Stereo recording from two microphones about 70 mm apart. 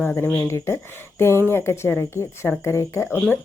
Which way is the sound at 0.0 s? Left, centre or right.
Left.